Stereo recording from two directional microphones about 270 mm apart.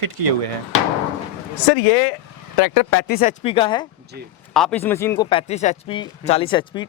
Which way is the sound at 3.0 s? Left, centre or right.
Left.